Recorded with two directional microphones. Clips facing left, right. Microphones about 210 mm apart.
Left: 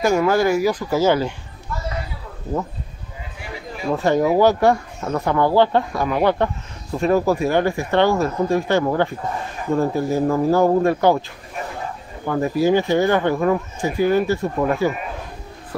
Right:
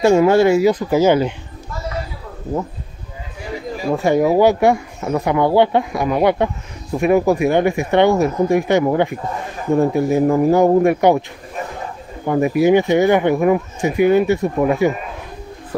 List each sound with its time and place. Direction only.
0.0 s speech: 25° right (ahead or behind)
3.9 s speech: 10° right (ahead or behind)
12.3 s speech: 15° right (ahead or behind)